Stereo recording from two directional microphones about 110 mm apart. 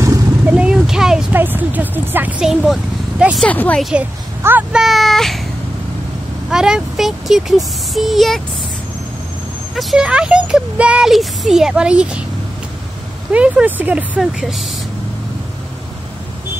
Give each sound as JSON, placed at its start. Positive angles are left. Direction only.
{"t": 0.0, "sound": "a sound", "side_deg": -30}
{"t": 0.5, "sound": "speech", "side_deg": -10}
{"t": 1.3, "sound": "speech", "side_deg": -20}
{"t": 2.4, "sound": "speech", "side_deg": 0}
{"t": 3.4, "sound": "speech", "side_deg": 15}
{"t": 4.4, "sound": "speech", "side_deg": -20}
{"t": 4.7, "sound": "speech", "side_deg": 0}
{"t": 6.5, "sound": "speech", "side_deg": -5}
{"t": 9.8, "sound": "speech", "side_deg": -5}
{"t": 13.3, "sound": "speech", "side_deg": -10}